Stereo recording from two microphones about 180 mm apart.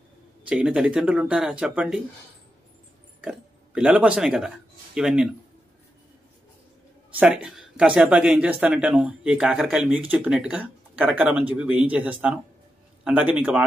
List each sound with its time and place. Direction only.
0.5 s speech: 5° right (ahead or behind)
3.2 s speech: 5° right (ahead or behind)
7.2 s speech: 5° right (ahead or behind)